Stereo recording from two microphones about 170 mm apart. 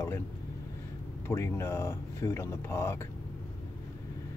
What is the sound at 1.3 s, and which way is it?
Speech, 15° left (ahead or behind).